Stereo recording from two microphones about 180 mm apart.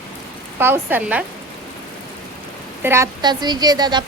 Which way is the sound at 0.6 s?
10° right (ahead or behind).